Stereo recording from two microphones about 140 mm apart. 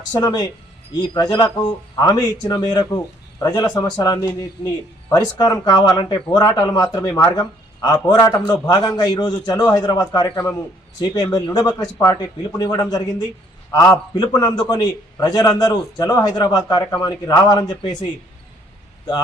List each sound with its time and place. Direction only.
0.1 s speech: 30° left (ahead or behind)